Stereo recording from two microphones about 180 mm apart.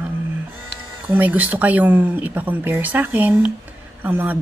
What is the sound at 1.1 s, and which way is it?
Speech, 10° right (ahead or behind).